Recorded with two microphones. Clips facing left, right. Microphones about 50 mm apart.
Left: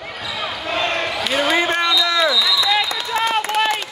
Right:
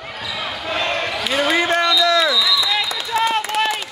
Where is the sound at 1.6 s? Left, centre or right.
Centre.